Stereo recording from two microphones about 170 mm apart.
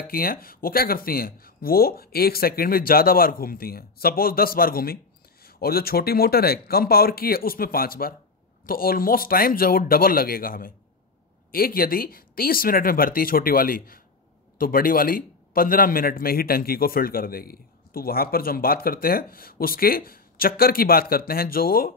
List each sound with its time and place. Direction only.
0.0 s a man's voice: 60° left (ahead or behind)